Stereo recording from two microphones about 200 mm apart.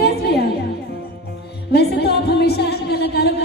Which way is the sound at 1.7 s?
55° left (ahead or behind).